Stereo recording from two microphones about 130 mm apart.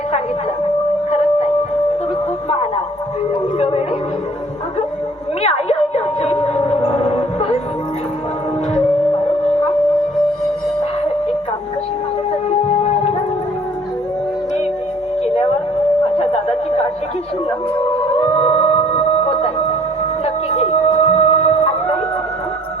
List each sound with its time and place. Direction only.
3.6 s a sound: 50° left (ahead or behind)
5.4 s music: 55° left (ahead or behind)
12.5 s music: 55° left (ahead or behind)
16.1 s music: 50° left (ahead or behind)
18.2 s music: 50° left (ahead or behind)